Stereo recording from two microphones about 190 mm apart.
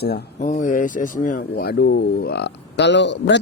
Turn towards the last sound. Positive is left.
turn(degrees=70)  # may be behind; listen again after turning